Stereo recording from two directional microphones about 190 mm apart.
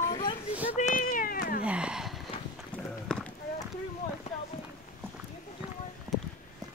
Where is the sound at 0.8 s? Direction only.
45° left (ahead or behind).